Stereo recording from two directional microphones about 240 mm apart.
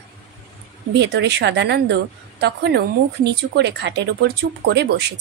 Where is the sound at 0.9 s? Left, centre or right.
Right.